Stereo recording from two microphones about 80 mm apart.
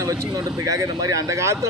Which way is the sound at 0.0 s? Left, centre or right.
Right.